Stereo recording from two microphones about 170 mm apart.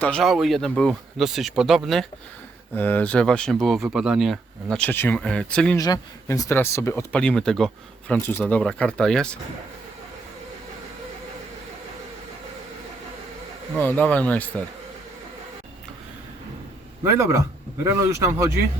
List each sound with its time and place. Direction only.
0.0 s speech: 5° left (ahead or behind)
2.7 s speech: 10° left (ahead or behind)
5.7 s speech: 20° left (ahead or behind); by 9.4 s 5° left (ahead or behind)
13.7 s speech: 10° left (ahead or behind)
17.0 s speech: 15° right (ahead or behind)